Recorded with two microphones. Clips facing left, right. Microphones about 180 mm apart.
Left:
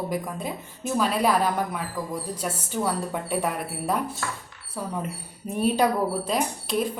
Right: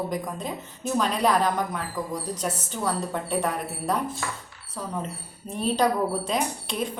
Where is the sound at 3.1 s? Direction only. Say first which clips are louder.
Even; 10° left (ahead or behind).